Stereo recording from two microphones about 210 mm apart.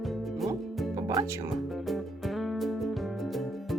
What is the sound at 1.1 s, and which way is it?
Speech, 15° right (ahead or behind).